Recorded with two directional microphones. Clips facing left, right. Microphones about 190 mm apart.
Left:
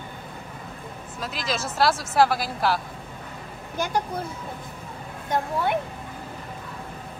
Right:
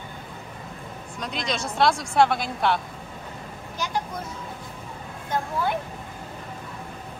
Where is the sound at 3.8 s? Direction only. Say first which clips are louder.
Left 4 dB; 55° left (ahead or behind).